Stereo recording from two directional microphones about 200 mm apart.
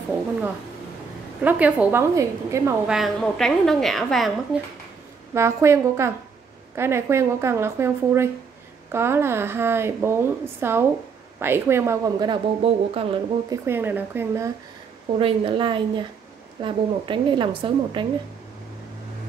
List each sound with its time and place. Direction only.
1.4 s speech: 10° right (ahead or behind)
2.9 s a woman's voice: centre (ahead or behind)
5.3 s speech: 15° right (ahead or behind)
13.7 s speech: 10° right (ahead or behind)
15.1 s a woman's voice: 25° right (ahead or behind)